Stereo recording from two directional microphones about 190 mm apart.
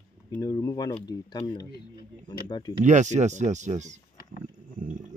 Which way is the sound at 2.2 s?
20° left (ahead or behind).